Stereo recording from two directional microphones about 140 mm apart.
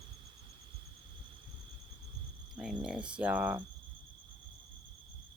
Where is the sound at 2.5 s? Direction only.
5° right (ahead or behind).